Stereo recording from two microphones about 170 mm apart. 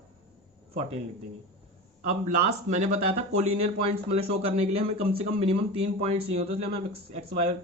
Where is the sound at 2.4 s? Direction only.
40° right (ahead or behind).